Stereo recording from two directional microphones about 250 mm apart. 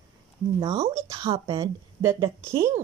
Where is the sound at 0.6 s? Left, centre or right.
Right.